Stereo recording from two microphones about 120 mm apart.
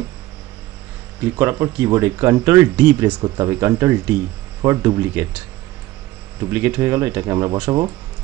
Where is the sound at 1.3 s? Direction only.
25° right (ahead or behind).